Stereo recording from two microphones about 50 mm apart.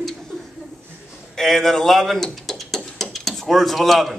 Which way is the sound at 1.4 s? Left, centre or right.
Centre.